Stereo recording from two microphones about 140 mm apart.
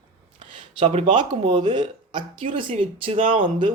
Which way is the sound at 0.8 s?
55° right (ahead or behind).